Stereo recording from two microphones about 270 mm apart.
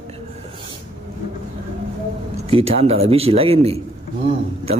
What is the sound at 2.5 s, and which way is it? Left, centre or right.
Speech, right.